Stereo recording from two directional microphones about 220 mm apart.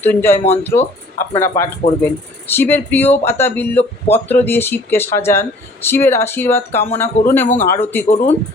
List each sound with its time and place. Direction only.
0.0 s speech: 10° left (ahead or behind)
0.8 s speech: 30° left (ahead or behind)
2.5 s speech: 10° left (ahead or behind)